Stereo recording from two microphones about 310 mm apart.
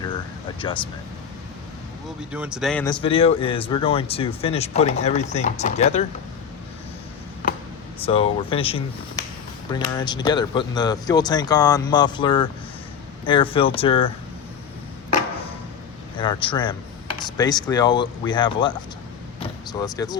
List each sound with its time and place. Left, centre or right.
2.3 s speech: centre
2.8 s speech: centre
8.0 s speech: centre
16.1 s speech: centre
19.4 s vehicle: centre